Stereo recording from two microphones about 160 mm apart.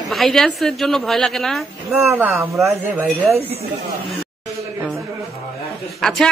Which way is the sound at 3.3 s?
40° right (ahead or behind).